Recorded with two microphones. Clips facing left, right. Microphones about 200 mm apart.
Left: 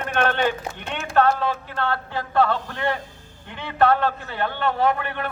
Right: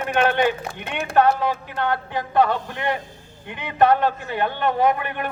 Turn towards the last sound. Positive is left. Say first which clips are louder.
# right 2 dB
turn(degrees=-15)  # may be behind; listen again after turning